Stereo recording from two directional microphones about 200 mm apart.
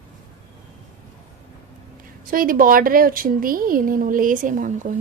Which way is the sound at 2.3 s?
45° right (ahead or behind).